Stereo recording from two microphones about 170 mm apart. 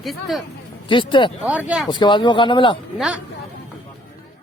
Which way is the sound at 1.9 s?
25° left (ahead or behind).